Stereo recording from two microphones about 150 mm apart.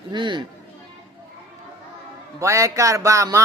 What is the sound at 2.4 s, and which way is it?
Speech, 20° right (ahead or behind).